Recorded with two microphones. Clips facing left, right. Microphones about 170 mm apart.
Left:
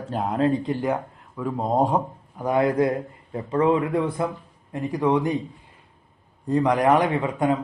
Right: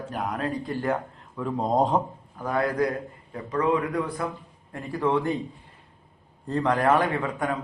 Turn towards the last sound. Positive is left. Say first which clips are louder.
# left 5 dB
turn(degrees=20)  # may be behind; listen again after turning